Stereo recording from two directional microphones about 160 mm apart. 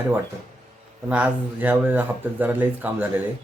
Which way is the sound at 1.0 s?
10° right (ahead or behind).